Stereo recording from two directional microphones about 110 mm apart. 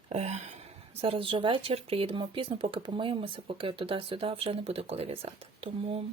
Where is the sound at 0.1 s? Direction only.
80° right.